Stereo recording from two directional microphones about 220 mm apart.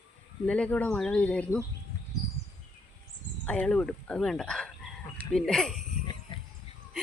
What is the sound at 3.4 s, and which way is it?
Speech, 5° left (ahead or behind).